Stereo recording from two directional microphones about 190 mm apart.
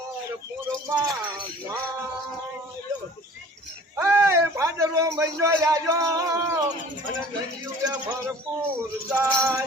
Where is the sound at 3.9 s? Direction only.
15° right (ahead or behind).